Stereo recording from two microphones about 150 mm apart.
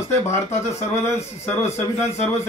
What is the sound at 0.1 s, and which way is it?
Speech, 20° left (ahead or behind).